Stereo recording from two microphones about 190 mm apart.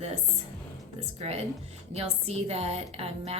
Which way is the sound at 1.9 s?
35° right (ahead or behind).